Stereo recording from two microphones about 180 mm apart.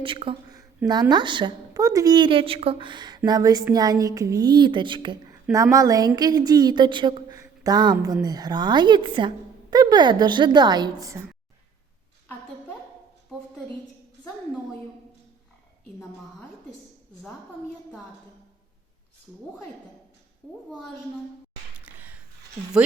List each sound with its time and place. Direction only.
0.0 s a woman's voice: 30° right (ahead or behind)
20.4 s a woman's voice: centre (ahead or behind)
21.8 s a sound: 10° right (ahead or behind)